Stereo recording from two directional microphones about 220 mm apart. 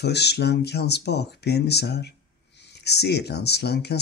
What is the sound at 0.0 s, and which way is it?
Speech, 50° left (ahead or behind).